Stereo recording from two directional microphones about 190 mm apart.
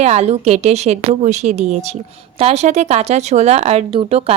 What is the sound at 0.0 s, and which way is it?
A woman's voice, 35° right (ahead or behind).